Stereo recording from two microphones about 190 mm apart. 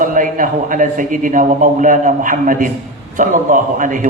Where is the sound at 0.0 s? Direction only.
45° right (ahead or behind).